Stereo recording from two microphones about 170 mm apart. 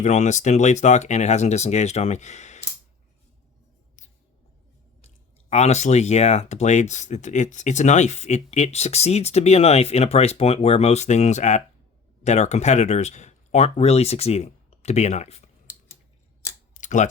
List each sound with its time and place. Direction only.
0.0 s speech: 45° left (ahead or behind)
5.0 s speech: 40° left (ahead or behind)
16.7 s computer keyboard: 45° left (ahead or behind)